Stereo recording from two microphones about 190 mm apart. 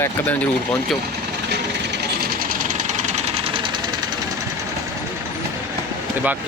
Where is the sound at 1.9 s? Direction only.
55° right (ahead or behind); by 4.0 s 20° right (ahead or behind).